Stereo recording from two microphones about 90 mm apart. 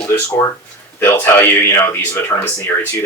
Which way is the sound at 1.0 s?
30° left (ahead or behind).